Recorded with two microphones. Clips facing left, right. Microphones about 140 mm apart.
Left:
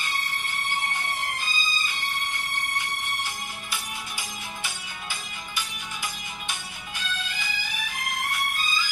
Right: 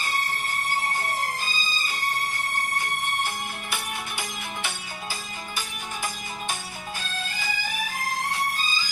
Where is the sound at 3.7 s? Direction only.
60° right (ahead or behind).